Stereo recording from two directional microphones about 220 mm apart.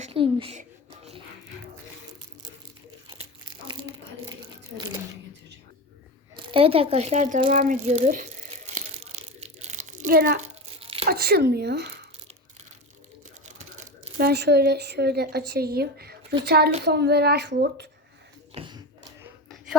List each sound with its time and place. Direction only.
0.0 s speech: 25° right (ahead or behind)
6.3 s speech: 25° right (ahead or behind)
7.5 s rattle: 35° right (ahead or behind)
10.8 s tearing: 25° right (ahead or behind)
11.0 s a woman's voice: 45° right (ahead or behind)
13.4 s typing: 30° right (ahead or behind)
14.2 s a woman's voice: 45° right (ahead or behind)
18.5 s a sound: 20° right (ahead or behind)